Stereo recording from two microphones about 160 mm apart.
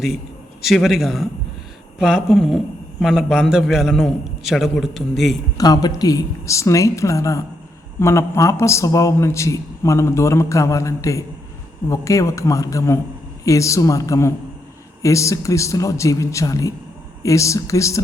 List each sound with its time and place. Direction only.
0.6 s a man's voice: centre (ahead or behind)
5.5 s a man's voice: 25° left (ahead or behind)